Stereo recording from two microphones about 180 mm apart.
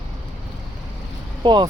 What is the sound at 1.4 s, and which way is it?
Speech, 25° right (ahead or behind).